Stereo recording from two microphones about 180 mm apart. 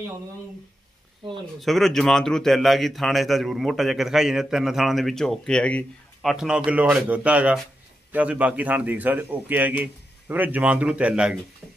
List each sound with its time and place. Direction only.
1.6 s a man's voice: centre (ahead or behind)
6.3 s a man's voice: 5° right (ahead or behind)